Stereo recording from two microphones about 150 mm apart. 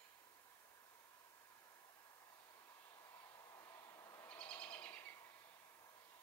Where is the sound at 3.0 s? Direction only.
20° left (ahead or behind).